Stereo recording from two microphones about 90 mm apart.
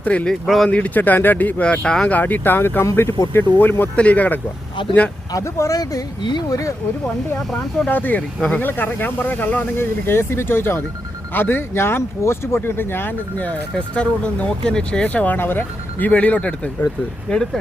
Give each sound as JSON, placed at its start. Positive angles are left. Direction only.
{"t": 0.0, "sound": "speech", "side_deg": 15}
{"t": 0.4, "sound": "speech", "side_deg": 0}
{"t": 0.7, "sound": "speech", "side_deg": 15}
{"t": 4.8, "sound": "speech", "side_deg": 65}
{"t": 5.3, "sound": "speech", "side_deg": 35}
{"t": 7.9, "sound": "speech", "side_deg": 20}